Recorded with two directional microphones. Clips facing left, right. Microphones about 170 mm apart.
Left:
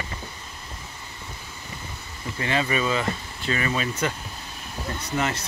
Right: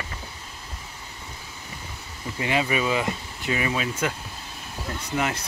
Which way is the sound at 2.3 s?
10° right (ahead or behind).